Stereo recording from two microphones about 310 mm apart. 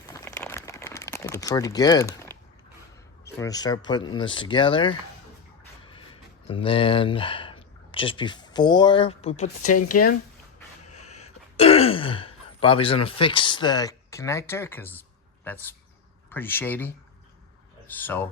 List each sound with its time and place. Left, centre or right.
0.1 s crumpling: centre
3.3 s speech: centre
6.5 s speech: centre
10.8 s a sound: left
11.5 s a man's voice: centre
17.9 s speech: centre